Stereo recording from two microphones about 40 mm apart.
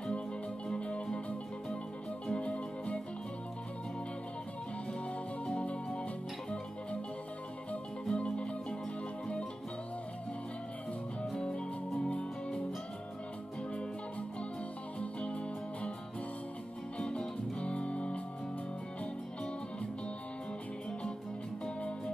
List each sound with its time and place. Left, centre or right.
0.7 s music: left
2.3 s music: left
5.4 s music: left
8.1 s music: left
11.3 s music: centre
15.0 s music: left
17.0 s music: centre
21.6 s music: centre